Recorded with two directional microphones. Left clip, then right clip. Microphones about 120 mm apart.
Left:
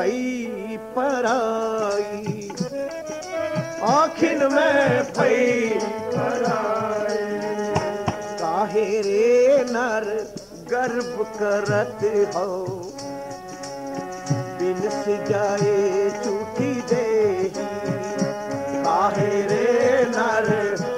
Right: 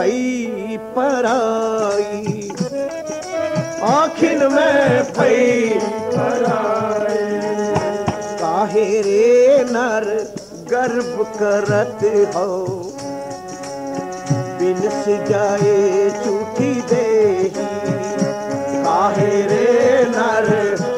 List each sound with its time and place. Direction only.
0.0 s music: 45° left (ahead or behind)
14.3 s music: 45° left (ahead or behind)